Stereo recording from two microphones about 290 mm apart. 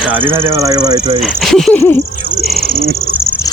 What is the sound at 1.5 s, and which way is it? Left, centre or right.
Speech, centre.